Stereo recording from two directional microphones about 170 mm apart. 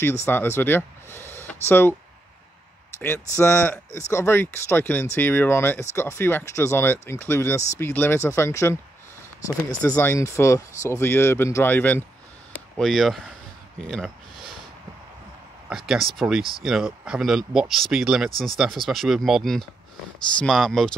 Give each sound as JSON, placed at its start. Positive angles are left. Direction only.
{"t": 0.0, "sound": "speech", "side_deg": 15}
{"t": 3.0, "sound": "speech", "side_deg": 15}
{"t": 9.8, "sound": "speech", "side_deg": 20}
{"t": 13.8, "sound": "a sound", "side_deg": 0}
{"t": 15.7, "sound": "speech", "side_deg": 0}